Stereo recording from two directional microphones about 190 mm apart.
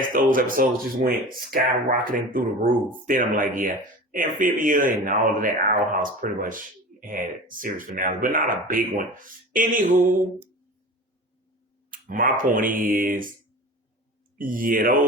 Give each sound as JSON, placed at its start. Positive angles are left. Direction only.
{"t": 0.1, "sound": "speech", "side_deg": -45}
{"t": 11.9, "sound": "speech", "side_deg": -45}
{"t": 14.3, "sound": "speech", "side_deg": -45}